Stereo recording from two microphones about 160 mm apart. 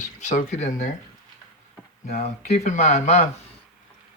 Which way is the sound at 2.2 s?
45° left (ahead or behind).